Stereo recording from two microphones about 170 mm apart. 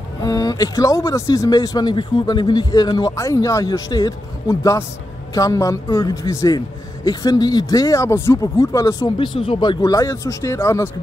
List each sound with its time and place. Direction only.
0.2 s speech: 20° left (ahead or behind)